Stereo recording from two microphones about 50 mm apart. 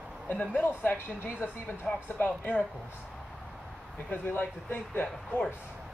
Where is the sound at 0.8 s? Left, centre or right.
Left.